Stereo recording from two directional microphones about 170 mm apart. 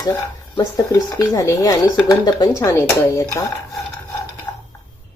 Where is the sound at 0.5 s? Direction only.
20° left (ahead or behind).